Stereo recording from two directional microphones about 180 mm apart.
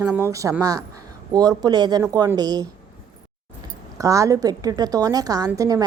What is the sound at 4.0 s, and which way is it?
A man's voice, 20° right (ahead or behind).